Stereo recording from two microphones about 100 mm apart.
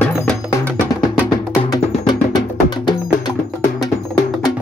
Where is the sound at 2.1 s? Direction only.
45° left (ahead or behind).